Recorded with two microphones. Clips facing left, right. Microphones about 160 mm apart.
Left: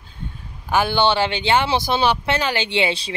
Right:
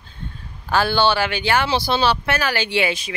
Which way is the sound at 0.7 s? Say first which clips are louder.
Even; 20° left (ahead or behind).